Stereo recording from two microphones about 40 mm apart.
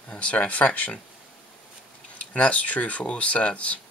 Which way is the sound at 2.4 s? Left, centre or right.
Left.